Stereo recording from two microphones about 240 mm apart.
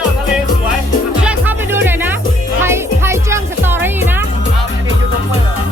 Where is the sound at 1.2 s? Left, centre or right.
Centre.